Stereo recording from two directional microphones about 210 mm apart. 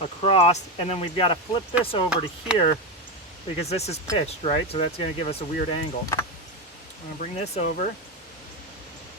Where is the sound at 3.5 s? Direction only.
30° left (ahead or behind).